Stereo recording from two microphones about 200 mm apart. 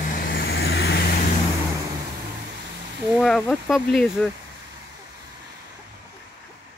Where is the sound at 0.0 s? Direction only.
55° left (ahead or behind).